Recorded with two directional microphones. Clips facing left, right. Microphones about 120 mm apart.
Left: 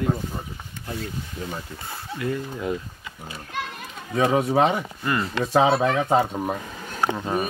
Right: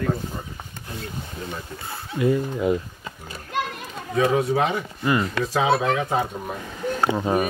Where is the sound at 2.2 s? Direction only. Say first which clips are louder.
Right 7 dB; 15° right (ahead or behind).